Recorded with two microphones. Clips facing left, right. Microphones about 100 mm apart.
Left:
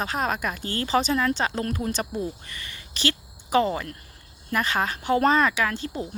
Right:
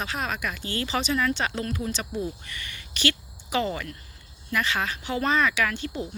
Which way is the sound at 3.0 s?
35° left (ahead or behind).